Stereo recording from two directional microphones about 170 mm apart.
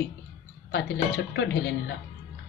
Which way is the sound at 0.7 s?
90° left.